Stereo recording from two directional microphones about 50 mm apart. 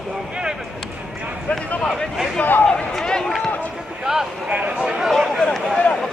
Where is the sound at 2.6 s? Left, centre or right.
Centre.